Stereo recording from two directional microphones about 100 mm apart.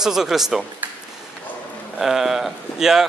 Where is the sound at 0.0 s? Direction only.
5° right (ahead or behind).